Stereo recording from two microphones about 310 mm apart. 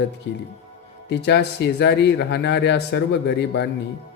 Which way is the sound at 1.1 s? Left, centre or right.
Left.